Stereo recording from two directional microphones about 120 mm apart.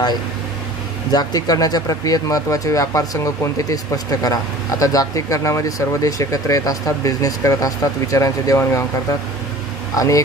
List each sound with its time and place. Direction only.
1.1 s speech: 30° left (ahead or behind)
9.9 s speech: 25° left (ahead or behind)